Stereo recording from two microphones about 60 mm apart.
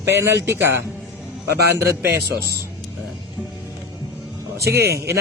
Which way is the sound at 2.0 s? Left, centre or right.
Right.